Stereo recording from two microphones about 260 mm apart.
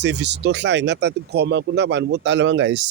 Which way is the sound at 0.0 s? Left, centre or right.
Right.